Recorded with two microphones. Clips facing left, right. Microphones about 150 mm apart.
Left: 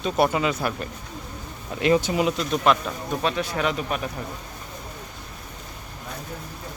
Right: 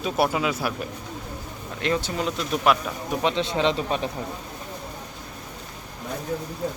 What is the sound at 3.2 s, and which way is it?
Speech, 25° right (ahead or behind).